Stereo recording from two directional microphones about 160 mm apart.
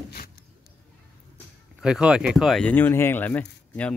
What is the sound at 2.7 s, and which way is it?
Speech, 15° left (ahead or behind).